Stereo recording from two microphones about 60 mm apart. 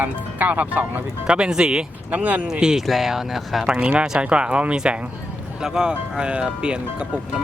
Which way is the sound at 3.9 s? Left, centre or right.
Centre.